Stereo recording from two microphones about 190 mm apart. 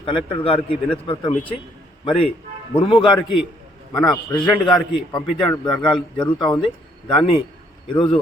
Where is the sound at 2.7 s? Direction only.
25° left (ahead or behind).